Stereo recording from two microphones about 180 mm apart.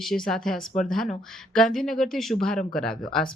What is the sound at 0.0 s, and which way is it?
Speech, centre (ahead or behind).